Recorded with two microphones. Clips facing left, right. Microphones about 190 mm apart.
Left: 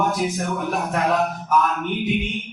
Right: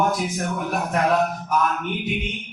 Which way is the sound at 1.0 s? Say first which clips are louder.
Right 2 dB; centre (ahead or behind).